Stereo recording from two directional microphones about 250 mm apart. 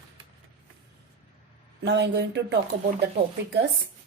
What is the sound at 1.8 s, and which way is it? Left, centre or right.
Speech, right.